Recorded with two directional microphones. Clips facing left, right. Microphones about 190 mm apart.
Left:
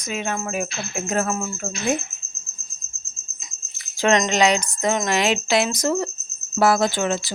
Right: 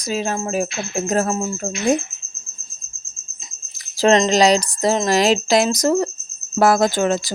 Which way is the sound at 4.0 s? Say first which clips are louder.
Right 4 dB; 30° right (ahead or behind).